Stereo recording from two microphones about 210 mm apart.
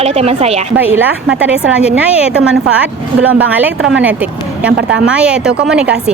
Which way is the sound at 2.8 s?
5° right (ahead or behind).